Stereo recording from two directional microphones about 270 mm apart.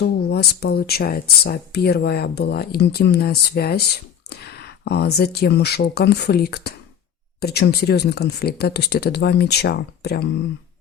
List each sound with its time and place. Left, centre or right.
0.0 s speech: left